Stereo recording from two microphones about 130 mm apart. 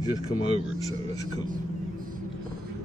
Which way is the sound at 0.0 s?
35° left (ahead or behind).